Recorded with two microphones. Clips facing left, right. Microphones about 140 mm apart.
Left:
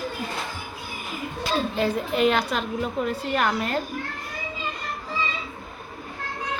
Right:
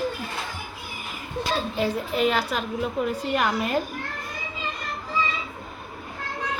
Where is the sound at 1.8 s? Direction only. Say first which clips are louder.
Left 1 dB; 10° right (ahead or behind).